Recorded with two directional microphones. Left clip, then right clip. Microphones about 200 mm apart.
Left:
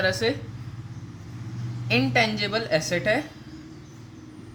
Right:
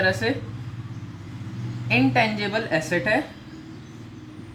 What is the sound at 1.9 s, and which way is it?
A woman's voice, 40° left (ahead or behind).